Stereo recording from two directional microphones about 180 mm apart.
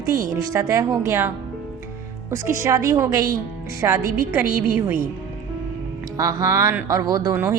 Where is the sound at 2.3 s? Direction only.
15° right (ahead or behind).